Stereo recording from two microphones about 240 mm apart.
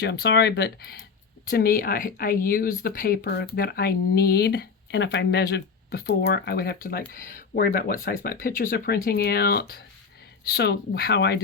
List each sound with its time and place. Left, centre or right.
0.0 s speech: left